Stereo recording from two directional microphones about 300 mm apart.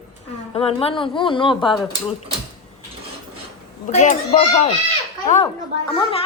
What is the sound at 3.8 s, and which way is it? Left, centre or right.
Speech, left.